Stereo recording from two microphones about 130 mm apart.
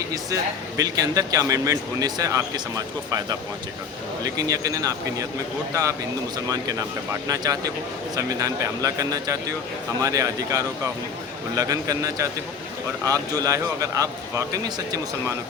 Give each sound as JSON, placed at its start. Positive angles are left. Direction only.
{"t": 0.8, "sound": "a man's voice", "side_deg": -30}
{"t": 6.5, "sound": "a man's voice", "side_deg": -30}